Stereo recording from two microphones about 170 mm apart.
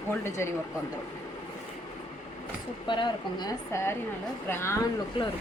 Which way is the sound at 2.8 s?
25° left (ahead or behind).